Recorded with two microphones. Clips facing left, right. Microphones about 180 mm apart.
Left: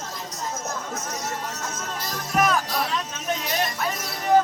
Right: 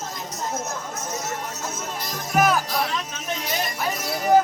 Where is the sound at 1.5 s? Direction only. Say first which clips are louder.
Right 1 dB; 10° right (ahead or behind).